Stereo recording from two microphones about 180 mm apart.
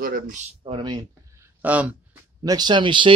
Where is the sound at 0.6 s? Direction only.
30° right (ahead or behind).